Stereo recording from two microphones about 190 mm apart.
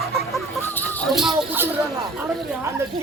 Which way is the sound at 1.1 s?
5° right (ahead or behind).